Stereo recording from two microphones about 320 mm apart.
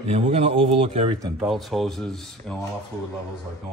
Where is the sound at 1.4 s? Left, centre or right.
Centre.